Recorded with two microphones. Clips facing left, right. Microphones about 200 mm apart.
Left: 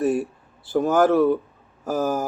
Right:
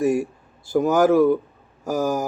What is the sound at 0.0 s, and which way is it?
Speech, 10° right (ahead or behind).